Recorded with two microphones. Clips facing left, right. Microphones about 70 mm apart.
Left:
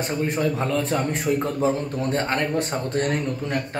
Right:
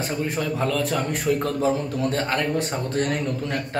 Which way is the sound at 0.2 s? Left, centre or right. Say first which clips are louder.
Left 2 dB; left.